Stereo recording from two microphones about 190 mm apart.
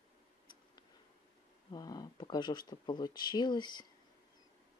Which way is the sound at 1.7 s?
20° left (ahead or behind).